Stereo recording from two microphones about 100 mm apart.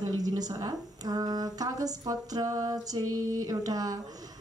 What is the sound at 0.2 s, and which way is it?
Speech, 35° right (ahead or behind).